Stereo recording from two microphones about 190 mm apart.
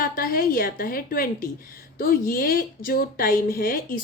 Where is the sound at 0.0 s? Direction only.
50° left (ahead or behind).